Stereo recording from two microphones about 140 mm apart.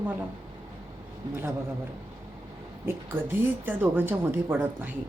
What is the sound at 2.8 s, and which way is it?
A woman's voice, 15° right (ahead or behind).